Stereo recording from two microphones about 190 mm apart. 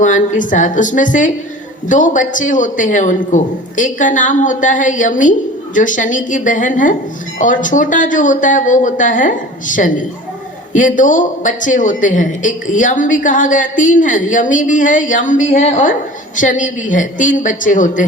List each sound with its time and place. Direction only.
0.0 s a woman's voice: 40° left (ahead or behind)